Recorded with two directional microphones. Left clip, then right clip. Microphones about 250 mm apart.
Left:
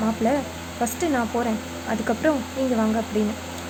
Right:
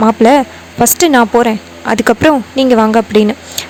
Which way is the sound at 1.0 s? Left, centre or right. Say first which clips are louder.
Right 16 dB; right.